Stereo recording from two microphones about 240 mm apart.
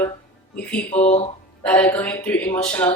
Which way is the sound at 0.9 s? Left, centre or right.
Left.